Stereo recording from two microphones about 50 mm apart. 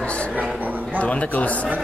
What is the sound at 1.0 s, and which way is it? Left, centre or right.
Speech, left.